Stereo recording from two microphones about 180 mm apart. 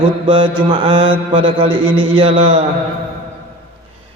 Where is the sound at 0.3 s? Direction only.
25° right (ahead or behind).